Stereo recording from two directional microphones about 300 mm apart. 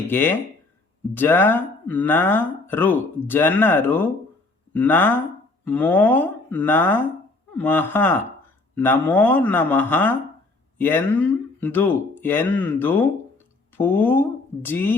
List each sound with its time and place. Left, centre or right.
0.1 s speech: centre